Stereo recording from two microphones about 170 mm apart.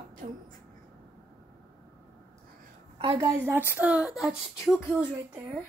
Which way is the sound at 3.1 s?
15° right (ahead or behind).